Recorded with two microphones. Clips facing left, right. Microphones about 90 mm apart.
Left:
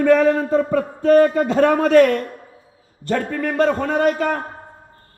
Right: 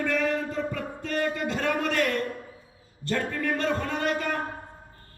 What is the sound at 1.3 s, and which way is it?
Speech, 30° left (ahead or behind).